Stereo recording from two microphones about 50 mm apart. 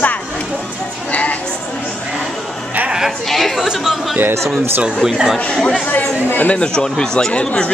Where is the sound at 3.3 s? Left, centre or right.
Centre.